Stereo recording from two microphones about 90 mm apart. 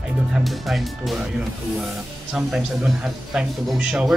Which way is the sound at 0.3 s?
Centre (ahead or behind).